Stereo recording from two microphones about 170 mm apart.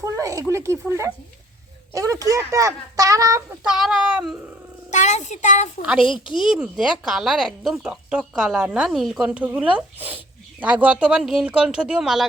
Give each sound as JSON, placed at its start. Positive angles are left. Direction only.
{"t": 0.0, "sound": "speech", "side_deg": -20}
{"t": 3.6, "sound": "speech", "side_deg": -5}
{"t": 4.9, "sound": "a child's voice", "side_deg": 45}
{"t": 5.8, "sound": "speech", "side_deg": -5}